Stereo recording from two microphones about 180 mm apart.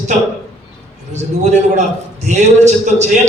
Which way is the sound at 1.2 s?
40° right (ahead or behind).